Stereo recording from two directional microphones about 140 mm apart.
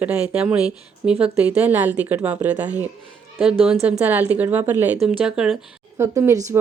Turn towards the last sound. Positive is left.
turn(degrees=-20)  # may be behind; listen again after turning